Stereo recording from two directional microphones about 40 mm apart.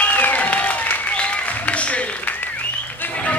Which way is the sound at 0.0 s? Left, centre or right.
Left.